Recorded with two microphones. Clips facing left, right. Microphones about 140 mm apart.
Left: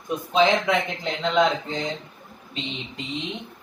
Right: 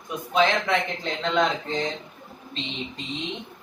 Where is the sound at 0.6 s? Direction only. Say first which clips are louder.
Left 1 dB; 15° left (ahead or behind).